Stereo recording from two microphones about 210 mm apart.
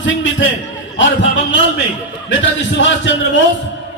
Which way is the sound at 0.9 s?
60° left (ahead or behind).